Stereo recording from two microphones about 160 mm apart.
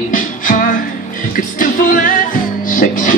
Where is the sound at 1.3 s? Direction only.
60° left (ahead or behind).